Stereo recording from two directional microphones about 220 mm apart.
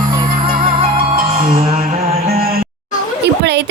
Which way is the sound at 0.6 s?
30° right (ahead or behind).